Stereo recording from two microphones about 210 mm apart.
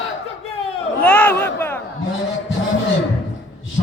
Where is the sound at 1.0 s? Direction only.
5° left (ahead or behind).